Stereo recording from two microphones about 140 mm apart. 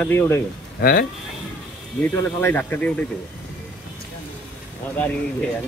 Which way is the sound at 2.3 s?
15° left (ahead or behind).